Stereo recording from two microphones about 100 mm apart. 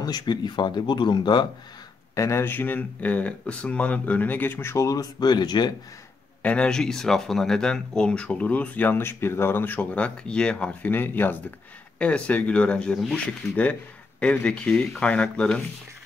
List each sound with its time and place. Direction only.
0.0 s speech: 45° left (ahead or behind)
2.1 s speech: 30° left (ahead or behind); by 5.7 s 45° left (ahead or behind)
6.4 s speech: 10° left (ahead or behind)